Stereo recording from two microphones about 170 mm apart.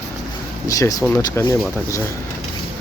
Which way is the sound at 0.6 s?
20° left (ahead or behind).